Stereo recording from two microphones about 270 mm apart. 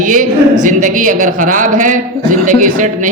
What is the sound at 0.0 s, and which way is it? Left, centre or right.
A woman's voice, right.